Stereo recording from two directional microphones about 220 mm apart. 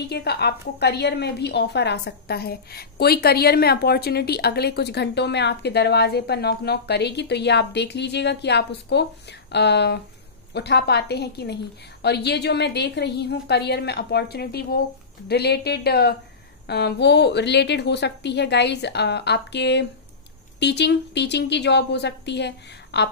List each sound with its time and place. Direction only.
0.1 s a woman's voice: 45° left (ahead or behind)